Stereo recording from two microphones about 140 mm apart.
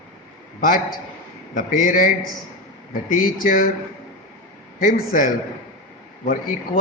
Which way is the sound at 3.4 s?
75° left (ahead or behind).